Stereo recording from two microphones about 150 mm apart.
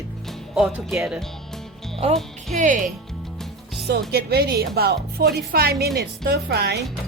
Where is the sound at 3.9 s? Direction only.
90° right.